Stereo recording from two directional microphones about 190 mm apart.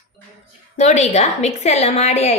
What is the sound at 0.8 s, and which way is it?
A woman's voice, 35° left (ahead or behind).